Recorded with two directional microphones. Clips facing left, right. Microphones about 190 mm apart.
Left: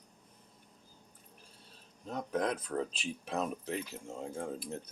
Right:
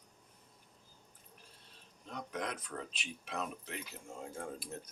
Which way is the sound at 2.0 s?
35° left (ahead or behind).